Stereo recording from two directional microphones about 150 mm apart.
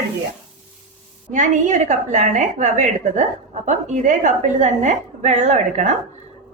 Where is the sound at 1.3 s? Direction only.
55° right (ahead or behind).